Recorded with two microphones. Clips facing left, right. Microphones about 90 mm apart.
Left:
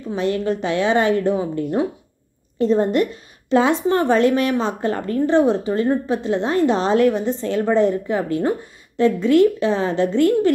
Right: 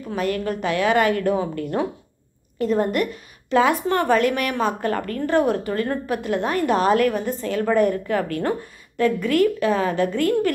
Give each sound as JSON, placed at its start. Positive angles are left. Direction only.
{"t": 0.1, "sound": "a woman's voice", "side_deg": 25}